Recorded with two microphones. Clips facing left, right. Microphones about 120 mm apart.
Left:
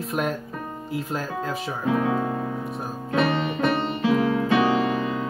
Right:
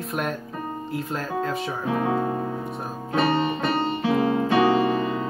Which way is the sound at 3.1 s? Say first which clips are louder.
Right 1 dB; 35° right (ahead or behind).